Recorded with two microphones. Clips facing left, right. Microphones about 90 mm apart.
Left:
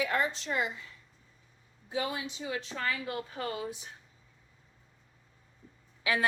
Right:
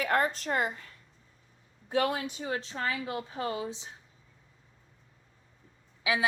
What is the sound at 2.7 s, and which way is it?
A woman's voice, 25° right (ahead or behind).